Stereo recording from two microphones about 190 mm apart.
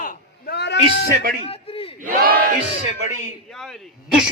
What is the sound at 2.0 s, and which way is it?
Battle cry, 50° right (ahead or behind).